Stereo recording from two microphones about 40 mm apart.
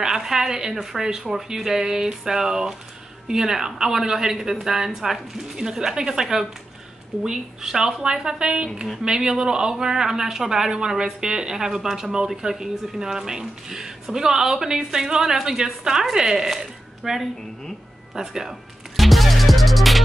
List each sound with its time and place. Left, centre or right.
0.0 s speech: centre
10.7 s speech: centre
18.9 s music: centre